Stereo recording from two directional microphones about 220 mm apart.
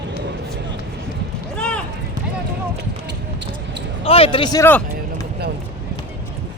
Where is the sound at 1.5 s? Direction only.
5° left (ahead or behind).